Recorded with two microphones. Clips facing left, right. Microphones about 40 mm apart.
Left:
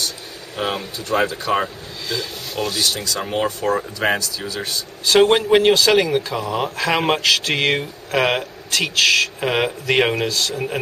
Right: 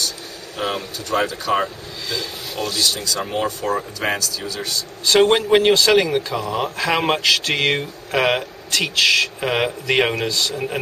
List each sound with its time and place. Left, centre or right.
0.6 s speech: centre
5.0 s a man's voice: centre